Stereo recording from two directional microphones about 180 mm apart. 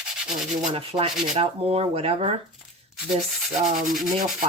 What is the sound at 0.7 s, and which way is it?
Speech, 30° right (ahead or behind).